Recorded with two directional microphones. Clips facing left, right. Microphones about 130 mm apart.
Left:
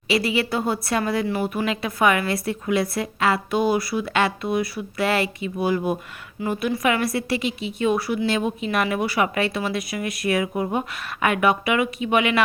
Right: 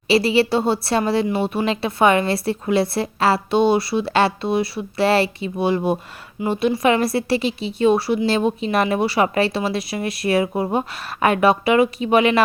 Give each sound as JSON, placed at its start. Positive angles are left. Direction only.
{"t": 0.1, "sound": "speech", "side_deg": -30}